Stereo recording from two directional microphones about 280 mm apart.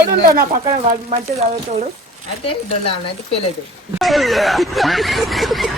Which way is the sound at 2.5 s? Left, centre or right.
Left.